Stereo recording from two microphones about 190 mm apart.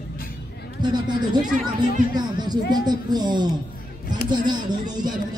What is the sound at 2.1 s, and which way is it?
Speech, 20° right (ahead or behind).